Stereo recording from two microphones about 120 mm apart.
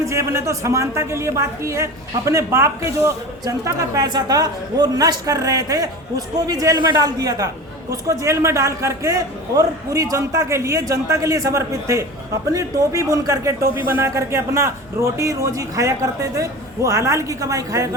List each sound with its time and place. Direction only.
0.0 s a man's voice: 25° right (ahead or behind)